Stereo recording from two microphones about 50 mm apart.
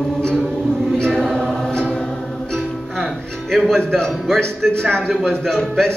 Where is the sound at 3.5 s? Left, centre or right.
Centre.